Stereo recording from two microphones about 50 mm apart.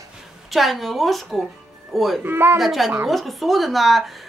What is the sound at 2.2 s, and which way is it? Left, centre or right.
Speech, right.